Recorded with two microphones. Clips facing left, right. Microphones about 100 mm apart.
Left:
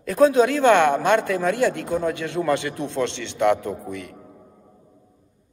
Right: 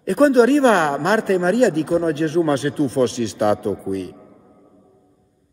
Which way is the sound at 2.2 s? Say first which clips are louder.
Right 9 dB; 30° right (ahead or behind).